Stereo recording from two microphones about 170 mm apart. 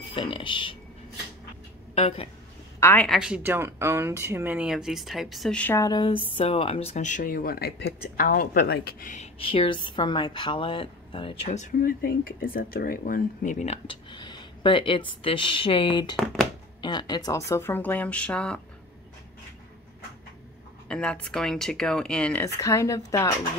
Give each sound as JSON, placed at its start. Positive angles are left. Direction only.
{"t": 0.1, "sound": "speech", "side_deg": 30}
{"t": 2.0, "sound": "speech", "side_deg": 35}
{"t": 2.8, "sound": "speech", "side_deg": 10}
{"t": 3.1, "sound": "speech", "side_deg": -5}
{"t": 5.9, "sound": "speech", "side_deg": 25}
{"t": 9.1, "sound": "a woman's voice", "side_deg": 35}
{"t": 11.5, "sound": "speech", "side_deg": 50}
{"t": 13.8, "sound": "speech", "side_deg": 25}
{"t": 20.9, "sound": "speech", "side_deg": 5}